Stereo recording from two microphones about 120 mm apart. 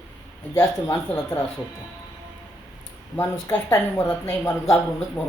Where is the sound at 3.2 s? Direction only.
20° left (ahead or behind).